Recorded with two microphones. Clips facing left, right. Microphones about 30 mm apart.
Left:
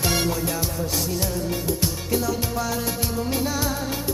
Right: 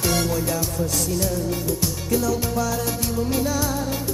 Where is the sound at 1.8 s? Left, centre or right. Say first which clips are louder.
Right 3 dB; centre.